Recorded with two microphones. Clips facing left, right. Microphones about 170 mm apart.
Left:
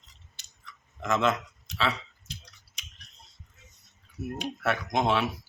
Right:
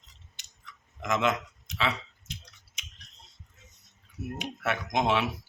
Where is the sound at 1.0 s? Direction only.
15° right (ahead or behind).